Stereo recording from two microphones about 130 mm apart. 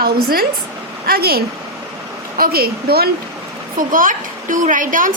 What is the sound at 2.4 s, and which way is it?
Speech, 90° right.